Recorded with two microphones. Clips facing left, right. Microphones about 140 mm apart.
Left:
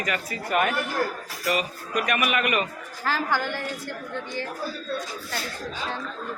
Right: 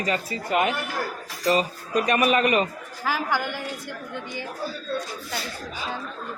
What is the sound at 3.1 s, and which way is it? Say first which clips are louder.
A woman's voice: even; 10° right (ahead or behind).